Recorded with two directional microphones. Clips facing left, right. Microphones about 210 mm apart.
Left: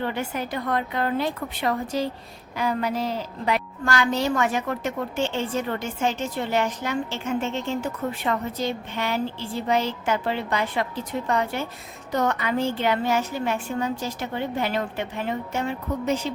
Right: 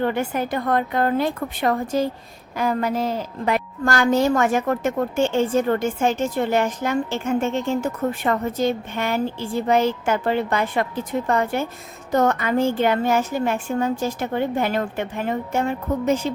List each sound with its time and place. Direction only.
0.0 s a woman's voice: 50° right (ahead or behind)